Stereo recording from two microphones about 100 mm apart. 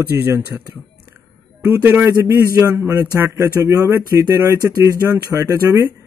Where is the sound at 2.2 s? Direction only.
30° right (ahead or behind).